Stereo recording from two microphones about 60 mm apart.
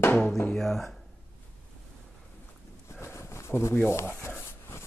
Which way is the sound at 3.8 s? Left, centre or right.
Left.